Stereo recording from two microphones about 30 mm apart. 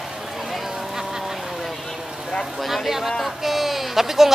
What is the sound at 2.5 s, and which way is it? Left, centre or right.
Speech, centre.